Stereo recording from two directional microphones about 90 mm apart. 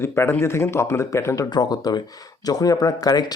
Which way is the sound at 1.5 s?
50° left (ahead or behind).